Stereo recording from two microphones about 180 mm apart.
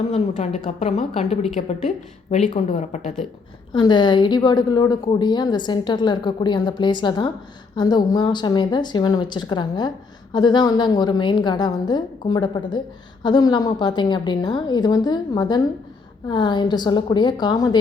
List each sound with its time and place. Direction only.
0.1 s a woman's voice: 40° left (ahead or behind)
2.5 s a woman's voice: 40° left (ahead or behind)
3.7 s a woman's voice: 25° left (ahead or behind)